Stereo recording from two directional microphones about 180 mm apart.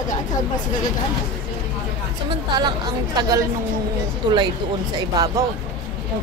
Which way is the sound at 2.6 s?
25° right (ahead or behind).